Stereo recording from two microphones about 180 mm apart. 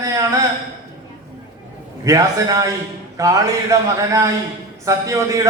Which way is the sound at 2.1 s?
20° right (ahead or behind).